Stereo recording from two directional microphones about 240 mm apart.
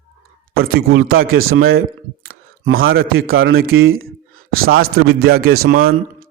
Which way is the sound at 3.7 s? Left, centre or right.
Right.